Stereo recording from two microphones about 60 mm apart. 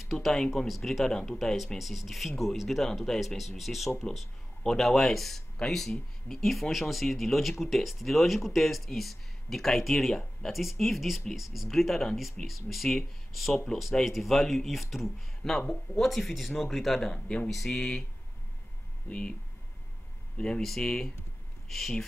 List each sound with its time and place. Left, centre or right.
0.0 s speech: centre
15.6 s speech: centre
16.0 s speech: centre
17.1 s speech: centre
19.0 s speech: centre
20.3 s speech: centre
20.6 s speech: centre